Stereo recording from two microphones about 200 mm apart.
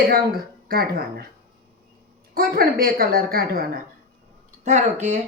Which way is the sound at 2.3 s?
50° right (ahead or behind).